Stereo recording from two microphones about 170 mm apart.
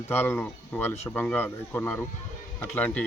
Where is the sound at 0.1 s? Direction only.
15° left (ahead or behind).